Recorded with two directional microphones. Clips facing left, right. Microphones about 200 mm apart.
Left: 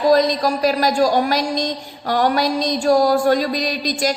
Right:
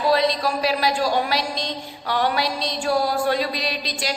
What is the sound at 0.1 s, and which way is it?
A man's voice, 45° left (ahead or behind).